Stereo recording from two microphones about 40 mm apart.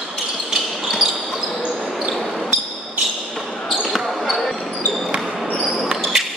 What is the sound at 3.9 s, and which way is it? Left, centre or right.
Basketball bounce, centre.